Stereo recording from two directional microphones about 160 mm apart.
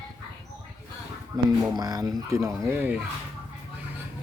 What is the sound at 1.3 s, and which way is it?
Speech, 25° right (ahead or behind).